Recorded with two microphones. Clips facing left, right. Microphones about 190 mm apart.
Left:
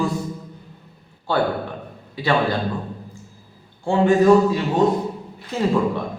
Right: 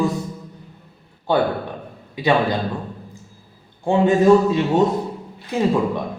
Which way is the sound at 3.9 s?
20° right (ahead or behind).